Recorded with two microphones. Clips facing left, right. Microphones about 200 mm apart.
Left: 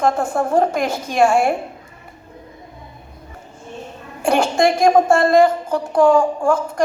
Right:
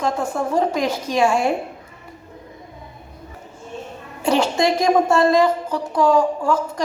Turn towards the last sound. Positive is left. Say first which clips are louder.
# left 2 dB
turn(degrees=50)  # may be behind; listen again after turning